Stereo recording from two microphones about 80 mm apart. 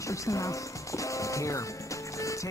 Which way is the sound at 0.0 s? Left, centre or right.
Left.